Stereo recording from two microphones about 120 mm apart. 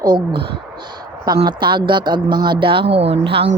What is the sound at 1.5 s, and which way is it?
Speech, 40° right (ahead or behind).